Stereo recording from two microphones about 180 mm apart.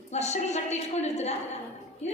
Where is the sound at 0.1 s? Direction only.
40° left (ahead or behind).